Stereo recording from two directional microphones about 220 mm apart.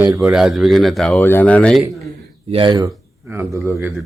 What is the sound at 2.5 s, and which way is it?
A man's voice, 20° right (ahead or behind).